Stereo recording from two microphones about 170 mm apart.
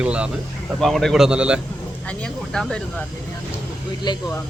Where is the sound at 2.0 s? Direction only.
5° left (ahead or behind).